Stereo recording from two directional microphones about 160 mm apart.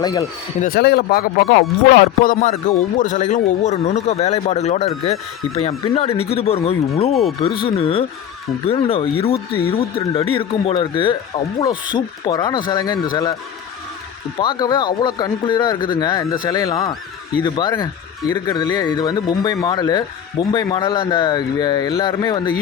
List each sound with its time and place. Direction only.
0.0 s speech: 25° left (ahead or behind)
0.6 s speech: 80° left; by 7.1 s 40° left (ahead or behind)
7.1 s speech: centre (ahead or behind)
7.4 s speech: 35° left (ahead or behind)
14.3 s speech: 25° left (ahead or behind)